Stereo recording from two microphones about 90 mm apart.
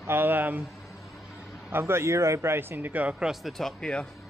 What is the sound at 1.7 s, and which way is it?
Speech, 25° right (ahead or behind).